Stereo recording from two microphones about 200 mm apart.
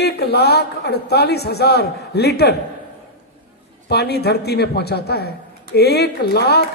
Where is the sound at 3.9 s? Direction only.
55° left (ahead or behind).